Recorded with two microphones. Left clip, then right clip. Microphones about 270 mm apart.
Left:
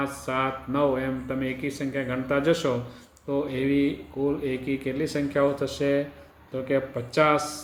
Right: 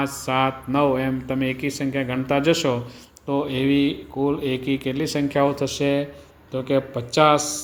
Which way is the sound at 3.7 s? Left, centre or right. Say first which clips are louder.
Right 4 dB; centre.